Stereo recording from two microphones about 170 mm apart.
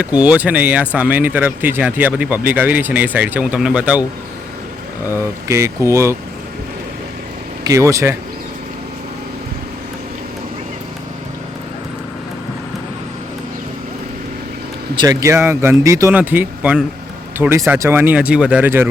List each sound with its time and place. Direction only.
0.0 s speech: 5° right (ahead or behind)
5.0 s speech: 15° right (ahead or behind)
7.6 s speech: 20° right (ahead or behind)
14.9 s speech: 20° right (ahead or behind)